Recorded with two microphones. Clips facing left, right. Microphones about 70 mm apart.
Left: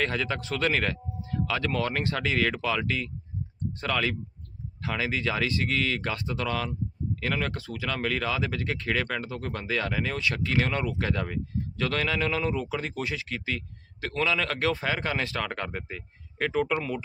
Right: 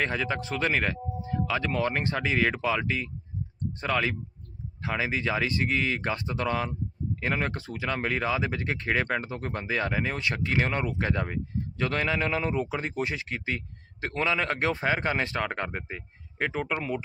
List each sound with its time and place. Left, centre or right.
0.0 s a man's voice: centre